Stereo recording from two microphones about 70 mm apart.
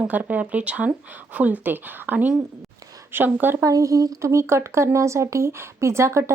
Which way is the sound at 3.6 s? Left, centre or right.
Right.